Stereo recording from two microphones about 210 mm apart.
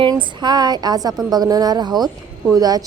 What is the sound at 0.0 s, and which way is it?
A woman's voice, 20° right (ahead or behind).